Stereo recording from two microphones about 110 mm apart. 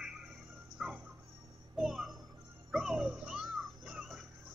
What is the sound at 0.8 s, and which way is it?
Music, centre (ahead or behind).